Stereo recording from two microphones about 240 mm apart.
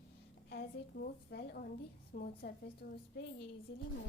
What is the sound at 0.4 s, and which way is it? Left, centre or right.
A woman's voice, left.